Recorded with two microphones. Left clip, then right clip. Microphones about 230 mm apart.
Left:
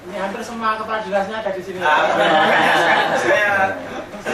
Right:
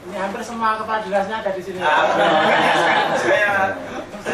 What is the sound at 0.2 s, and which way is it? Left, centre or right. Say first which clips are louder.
Speech: right 1 dB; centre.